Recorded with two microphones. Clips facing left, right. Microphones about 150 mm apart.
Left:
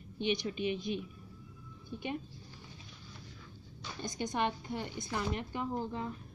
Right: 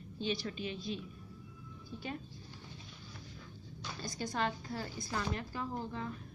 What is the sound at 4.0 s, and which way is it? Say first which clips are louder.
A woman's voice: left 3 dB; 20° left (ahead or behind).